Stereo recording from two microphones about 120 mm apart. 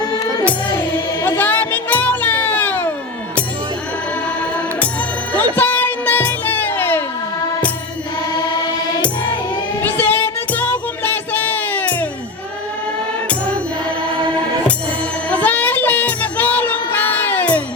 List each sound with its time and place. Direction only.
1.4 s music: 15° left (ahead or behind)
4.8 s music: 10° left (ahead or behind)
9.8 s music: 15° left (ahead or behind)
13.2 s music: 10° left (ahead or behind)
15.3 s music: 15° left (ahead or behind)